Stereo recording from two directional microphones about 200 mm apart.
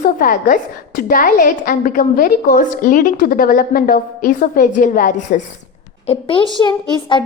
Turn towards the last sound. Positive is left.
turn(degrees=25)  # may be behind; listen again after turning